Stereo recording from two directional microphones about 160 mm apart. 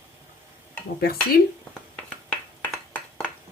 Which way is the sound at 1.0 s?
70° left (ahead or behind).